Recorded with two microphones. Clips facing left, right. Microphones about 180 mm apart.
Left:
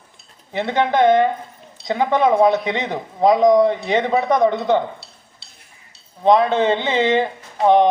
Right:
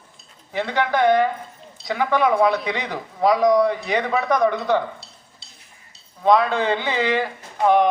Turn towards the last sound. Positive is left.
turn(degrees=25)  # may be behind; listen again after turning